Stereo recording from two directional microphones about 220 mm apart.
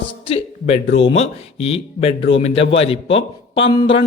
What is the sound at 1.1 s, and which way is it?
Speech, 25° left (ahead or behind).